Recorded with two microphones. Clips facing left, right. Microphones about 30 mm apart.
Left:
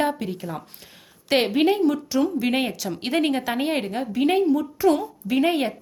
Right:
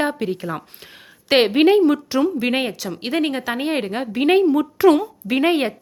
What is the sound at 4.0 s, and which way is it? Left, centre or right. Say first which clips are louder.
Speech: right 5 dB; right.